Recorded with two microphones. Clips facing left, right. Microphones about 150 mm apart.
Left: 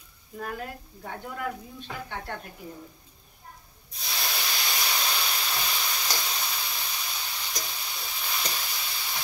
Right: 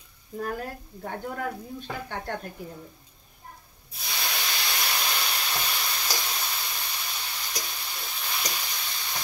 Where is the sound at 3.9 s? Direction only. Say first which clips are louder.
Even; centre (ahead or behind).